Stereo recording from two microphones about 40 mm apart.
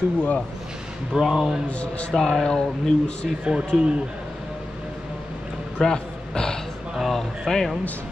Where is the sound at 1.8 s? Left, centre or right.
Left.